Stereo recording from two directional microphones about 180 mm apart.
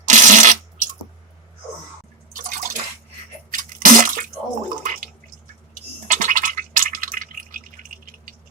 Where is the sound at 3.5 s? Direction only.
45° right (ahead or behind).